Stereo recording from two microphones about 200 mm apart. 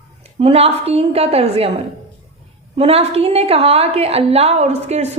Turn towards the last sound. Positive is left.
turn(degrees=-35)  # may be behind; listen again after turning